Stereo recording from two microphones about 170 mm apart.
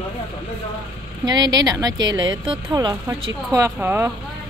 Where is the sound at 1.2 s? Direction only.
25° right (ahead or behind).